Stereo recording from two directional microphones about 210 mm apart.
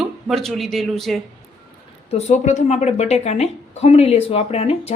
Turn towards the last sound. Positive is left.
turn(degrees=30)  # may be behind; listen again after turning